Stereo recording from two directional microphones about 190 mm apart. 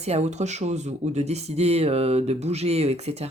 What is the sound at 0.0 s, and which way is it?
Speech, 35° right (ahead or behind).